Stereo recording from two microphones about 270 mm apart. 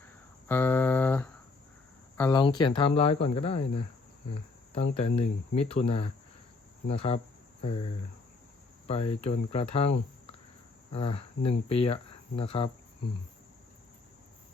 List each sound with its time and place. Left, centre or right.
0.4 s a sound: centre
2.1 s speech: centre
4.7 s speech: left
8.9 s speech: left